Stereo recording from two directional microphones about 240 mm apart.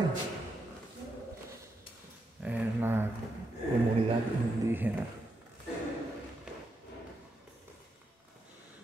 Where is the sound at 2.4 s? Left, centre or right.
Centre.